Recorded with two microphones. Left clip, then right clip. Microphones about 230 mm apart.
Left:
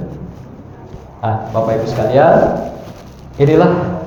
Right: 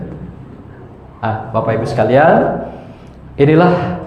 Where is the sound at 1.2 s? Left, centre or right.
Right.